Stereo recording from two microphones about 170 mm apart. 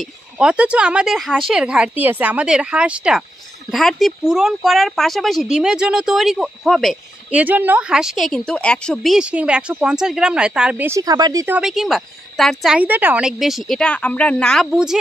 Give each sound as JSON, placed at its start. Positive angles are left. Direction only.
{"t": 0.0, "sound": "speech", "side_deg": -5}
{"t": 11.0, "sound": "speech", "side_deg": -25}
{"t": 11.4, "sound": "speech", "side_deg": -5}